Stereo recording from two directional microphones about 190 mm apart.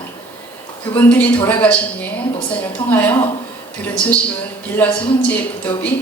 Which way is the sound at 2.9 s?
10° left (ahead or behind).